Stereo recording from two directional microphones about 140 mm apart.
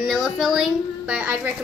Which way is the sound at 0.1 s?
Centre (ahead or behind).